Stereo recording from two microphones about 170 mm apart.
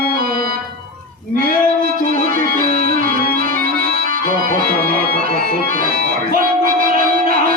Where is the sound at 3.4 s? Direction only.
60° right (ahead or behind).